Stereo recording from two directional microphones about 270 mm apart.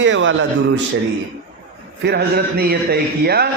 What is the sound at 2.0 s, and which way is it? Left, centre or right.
Speech, right.